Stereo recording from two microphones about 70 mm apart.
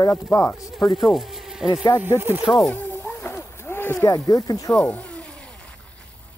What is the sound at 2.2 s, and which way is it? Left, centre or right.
Speech, right.